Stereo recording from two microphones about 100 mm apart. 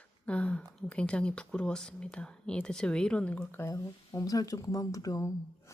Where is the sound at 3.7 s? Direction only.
35° left (ahead or behind).